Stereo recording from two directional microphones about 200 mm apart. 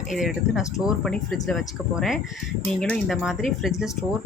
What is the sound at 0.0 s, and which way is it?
Speech, centre (ahead or behind).